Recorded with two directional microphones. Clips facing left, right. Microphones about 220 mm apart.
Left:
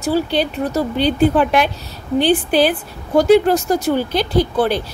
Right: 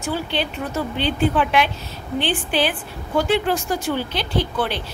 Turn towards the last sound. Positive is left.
turn(degrees=40)  # may be behind; listen again after turning